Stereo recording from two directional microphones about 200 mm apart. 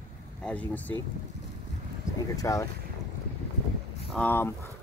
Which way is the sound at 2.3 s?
15° left (ahead or behind).